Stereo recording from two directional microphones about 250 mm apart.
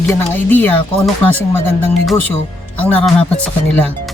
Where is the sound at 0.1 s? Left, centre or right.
Centre.